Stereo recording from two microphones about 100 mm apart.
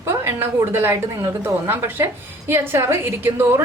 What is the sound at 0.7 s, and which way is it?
Speech, 25° right (ahead or behind).